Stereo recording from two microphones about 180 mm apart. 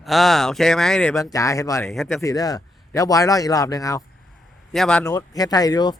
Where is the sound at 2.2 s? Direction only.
20° left (ahead or behind).